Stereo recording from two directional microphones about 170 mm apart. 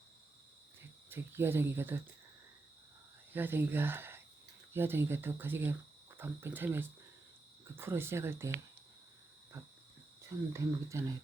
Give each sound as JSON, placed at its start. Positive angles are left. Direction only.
{"t": 1.1, "sound": "speech", "side_deg": -15}
{"t": 3.3, "sound": "speech", "side_deg": -10}